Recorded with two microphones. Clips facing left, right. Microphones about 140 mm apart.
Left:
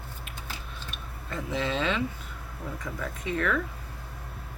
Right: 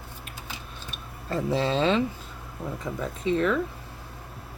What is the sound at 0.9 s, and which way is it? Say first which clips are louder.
Speech: right 7 dB; 35° right (ahead or behind).